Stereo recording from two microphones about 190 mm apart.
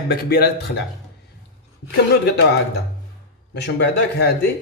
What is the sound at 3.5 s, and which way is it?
Speech, 60° left (ahead or behind).